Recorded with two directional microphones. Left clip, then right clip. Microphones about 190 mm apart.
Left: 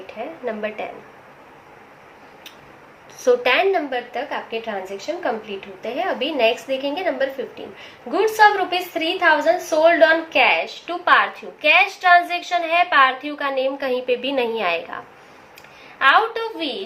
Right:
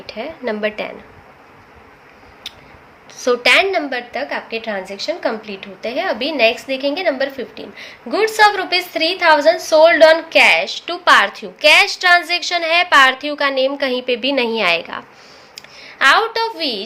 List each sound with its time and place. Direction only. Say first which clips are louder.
0.1 s a woman's voice: right 5 dB; 50° right (ahead or behind)
3.2 s a woman's voice: right 3 dB; 35° right (ahead or behind)
16.0 s a woman's voice: right 3 dB; 50° right (ahead or behind)